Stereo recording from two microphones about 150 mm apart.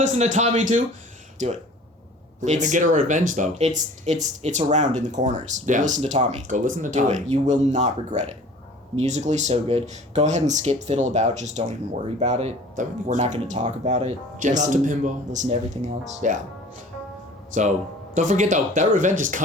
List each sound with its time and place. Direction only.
0.0 s speech: 50° right (ahead or behind)
17.5 s speech: 55° right (ahead or behind)